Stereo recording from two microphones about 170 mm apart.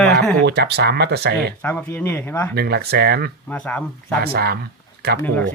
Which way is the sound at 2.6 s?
70° right (ahead or behind).